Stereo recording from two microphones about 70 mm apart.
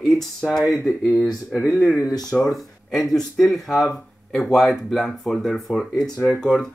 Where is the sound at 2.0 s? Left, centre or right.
Left.